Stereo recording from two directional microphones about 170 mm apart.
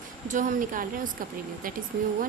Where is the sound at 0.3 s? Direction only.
50° right (ahead or behind).